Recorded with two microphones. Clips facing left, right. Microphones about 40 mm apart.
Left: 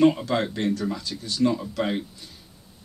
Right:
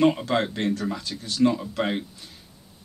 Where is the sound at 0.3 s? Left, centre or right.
Centre.